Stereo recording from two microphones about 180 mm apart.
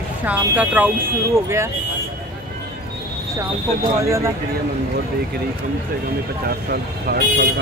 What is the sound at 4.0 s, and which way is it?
Speech, 15° right (ahead or behind).